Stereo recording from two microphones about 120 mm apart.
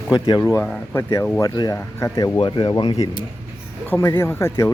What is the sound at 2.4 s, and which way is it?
Speech, 40° left (ahead or behind).